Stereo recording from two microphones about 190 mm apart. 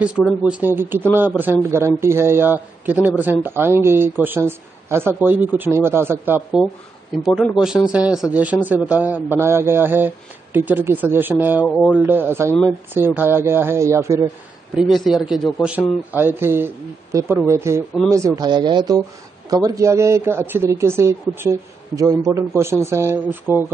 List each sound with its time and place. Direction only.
0.2 s a man's voice: 5° right (ahead or behind)
11.6 s a sound: 5° left (ahead or behind)
11.9 s speech: 10° right (ahead or behind)
14.8 s a man's voice: centre (ahead or behind)